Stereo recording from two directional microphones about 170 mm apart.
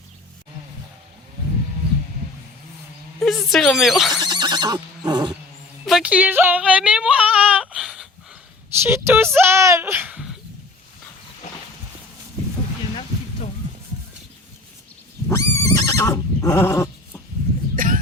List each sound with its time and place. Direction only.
3.2 s speech: centre (ahead or behind)
4.2 s neigh: 25° right (ahead or behind)
5.8 s yodeling: 5° right (ahead or behind)
8.8 s speech: 15° right (ahead or behind)
15.3 s neigh: 15° left (ahead or behind)
17.7 s cough: 55° right (ahead or behind)